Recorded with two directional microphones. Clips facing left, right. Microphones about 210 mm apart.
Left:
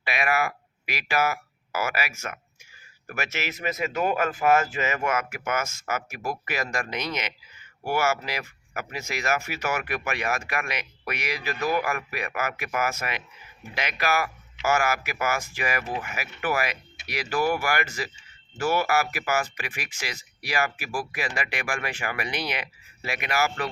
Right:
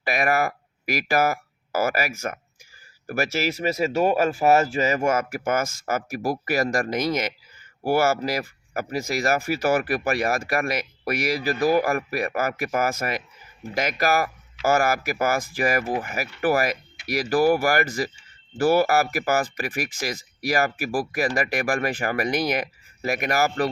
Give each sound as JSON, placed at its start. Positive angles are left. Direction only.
{"t": 0.0, "sound": "speech", "side_deg": -40}